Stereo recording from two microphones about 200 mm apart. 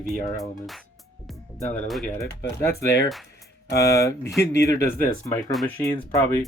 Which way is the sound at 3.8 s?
15° left (ahead or behind).